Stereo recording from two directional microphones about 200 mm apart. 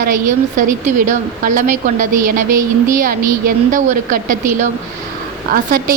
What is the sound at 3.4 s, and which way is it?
Speech, 40° right (ahead or behind).